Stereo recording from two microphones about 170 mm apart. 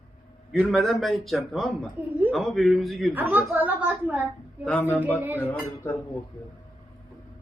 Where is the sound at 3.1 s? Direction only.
10° right (ahead or behind).